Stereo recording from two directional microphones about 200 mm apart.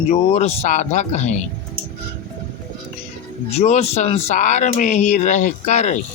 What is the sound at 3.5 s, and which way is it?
Speech, 30° left (ahead or behind).